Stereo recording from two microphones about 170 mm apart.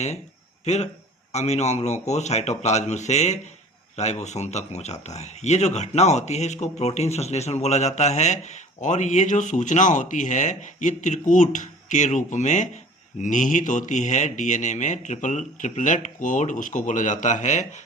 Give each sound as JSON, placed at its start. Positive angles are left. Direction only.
{"t": 0.6, "sound": "speech", "side_deg": 40}